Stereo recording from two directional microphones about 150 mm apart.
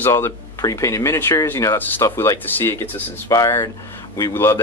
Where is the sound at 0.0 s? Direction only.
20° left (ahead or behind).